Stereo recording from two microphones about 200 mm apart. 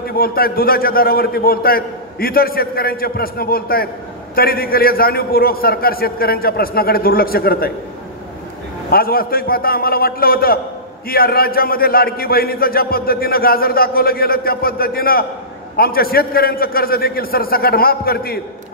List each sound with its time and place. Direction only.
0.0 s a man's voice: 50° left (ahead or behind)
8.9 s a man's voice: 50° left (ahead or behind)